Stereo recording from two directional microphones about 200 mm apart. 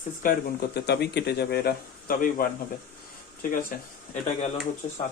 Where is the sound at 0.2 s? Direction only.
45° left (ahead or behind).